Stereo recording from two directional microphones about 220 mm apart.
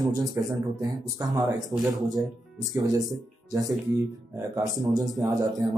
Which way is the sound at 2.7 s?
15° right (ahead or behind).